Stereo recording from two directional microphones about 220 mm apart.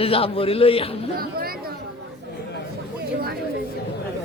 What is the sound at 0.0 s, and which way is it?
Speech, 25° left (ahead or behind).